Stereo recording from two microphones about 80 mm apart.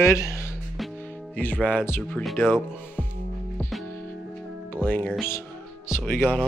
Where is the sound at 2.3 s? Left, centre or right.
Left.